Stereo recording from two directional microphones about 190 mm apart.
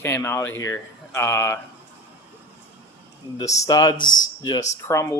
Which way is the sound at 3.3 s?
20° left (ahead or behind).